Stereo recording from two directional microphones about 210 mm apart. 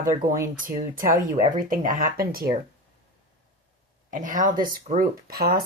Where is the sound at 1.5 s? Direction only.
40° right (ahead or behind).